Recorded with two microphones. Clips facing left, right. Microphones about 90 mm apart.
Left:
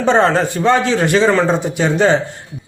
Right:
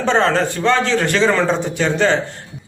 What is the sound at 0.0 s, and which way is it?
A man's voice, 15° left (ahead or behind).